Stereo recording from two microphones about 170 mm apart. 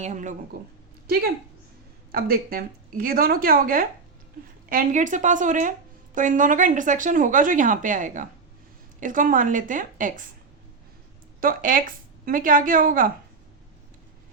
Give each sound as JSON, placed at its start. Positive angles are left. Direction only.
{"t": 0.0, "sound": "speech", "side_deg": -45}
{"t": 2.1, "sound": "speech", "side_deg": -60}
{"t": 4.7, "sound": "speech", "side_deg": -50}
{"t": 11.3, "sound": "speech", "side_deg": -55}